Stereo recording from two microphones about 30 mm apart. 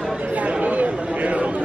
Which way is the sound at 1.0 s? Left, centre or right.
Right.